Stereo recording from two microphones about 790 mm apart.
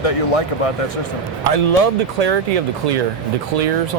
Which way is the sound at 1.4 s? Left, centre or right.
Right.